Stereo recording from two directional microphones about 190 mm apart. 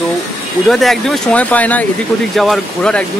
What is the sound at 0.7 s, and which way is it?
Speech, centre (ahead or behind).